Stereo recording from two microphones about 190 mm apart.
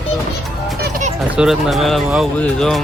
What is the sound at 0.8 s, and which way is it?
Music, 40° right (ahead or behind).